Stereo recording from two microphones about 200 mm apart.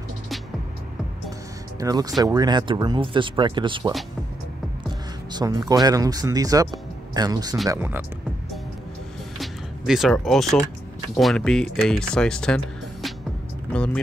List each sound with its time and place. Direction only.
1.8 s speech: 20° right (ahead or behind)
5.3 s speech: 20° right (ahead or behind)
9.4 s speech: centre (ahead or behind)